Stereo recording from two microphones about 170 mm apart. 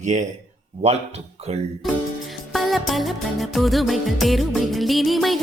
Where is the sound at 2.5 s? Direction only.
Centre (ahead or behind).